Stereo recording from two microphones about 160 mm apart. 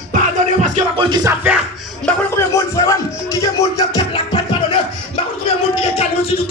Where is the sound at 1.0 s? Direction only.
25° right (ahead or behind).